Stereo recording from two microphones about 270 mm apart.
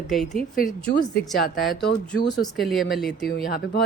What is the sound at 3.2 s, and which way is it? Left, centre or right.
Speech, left.